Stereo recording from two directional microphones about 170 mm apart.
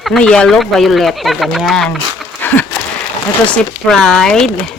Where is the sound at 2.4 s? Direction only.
10° left (ahead or behind).